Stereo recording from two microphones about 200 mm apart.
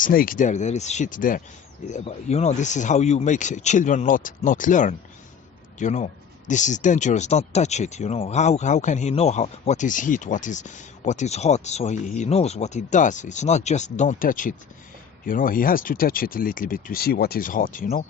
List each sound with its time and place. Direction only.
0.0 s speech: 45° left (ahead or behind)
1.9 s speech: 30° left (ahead or behind)